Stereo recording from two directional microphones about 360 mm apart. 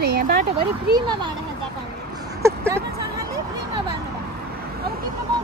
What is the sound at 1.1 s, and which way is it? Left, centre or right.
Speech, centre.